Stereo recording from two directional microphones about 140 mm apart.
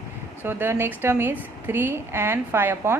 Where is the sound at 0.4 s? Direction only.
15° right (ahead or behind).